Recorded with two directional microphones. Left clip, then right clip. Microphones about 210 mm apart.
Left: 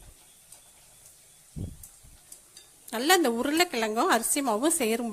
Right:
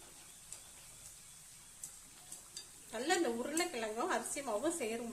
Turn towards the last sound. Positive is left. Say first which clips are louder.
# left 11 dB
turn(degrees=50)  # may be behind; listen again after turning